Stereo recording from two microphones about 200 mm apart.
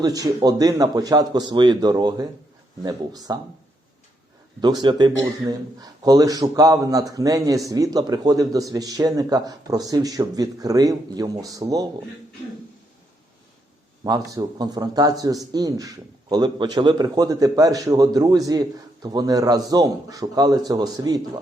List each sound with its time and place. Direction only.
0.0 s a man's voice: 20° right (ahead or behind)
4.6 s a man's voice: 20° right (ahead or behind)
14.0 s a man's voice: 20° right (ahead or behind)